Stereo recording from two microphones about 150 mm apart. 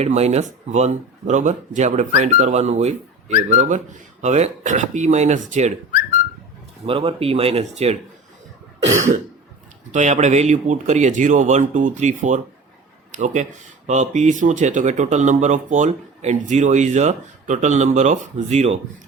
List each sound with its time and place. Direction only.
0.0 s speech: 45° right (ahead or behind)
6.8 s speech: 40° right (ahead or behind)
9.0 s cough: 55° right (ahead or behind)
9.9 s speech: 50° right (ahead or behind)